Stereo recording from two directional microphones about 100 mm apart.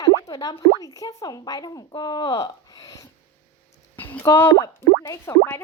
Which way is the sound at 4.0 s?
20° left (ahead or behind).